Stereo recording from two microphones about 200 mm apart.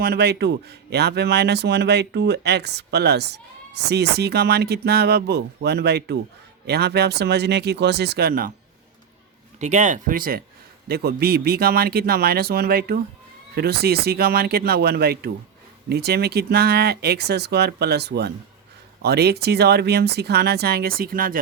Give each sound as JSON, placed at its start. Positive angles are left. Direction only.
{"t": 0.0, "sound": "a man's voice", "side_deg": -55}
{"t": 9.6, "sound": "speech", "side_deg": -35}